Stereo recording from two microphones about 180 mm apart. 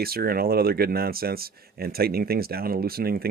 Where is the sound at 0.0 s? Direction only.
55° right (ahead or behind).